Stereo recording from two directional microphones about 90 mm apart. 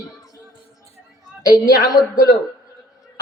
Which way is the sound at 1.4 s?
40° left (ahead or behind).